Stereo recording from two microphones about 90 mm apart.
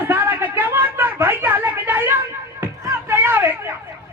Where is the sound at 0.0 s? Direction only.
25° right (ahead or behind).